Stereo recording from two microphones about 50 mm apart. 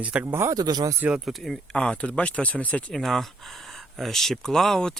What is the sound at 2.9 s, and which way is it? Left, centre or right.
Speech, centre.